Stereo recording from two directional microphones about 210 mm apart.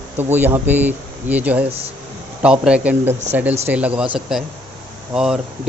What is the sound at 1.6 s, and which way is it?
Speech, 30° right (ahead or behind).